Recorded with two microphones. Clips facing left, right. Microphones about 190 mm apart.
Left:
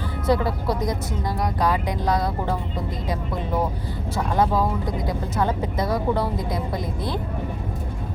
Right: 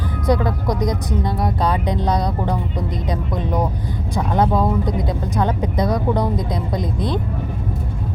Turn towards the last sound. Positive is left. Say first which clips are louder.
# right 5 dB
turn(degrees=-20)  # may be behind; listen again after turning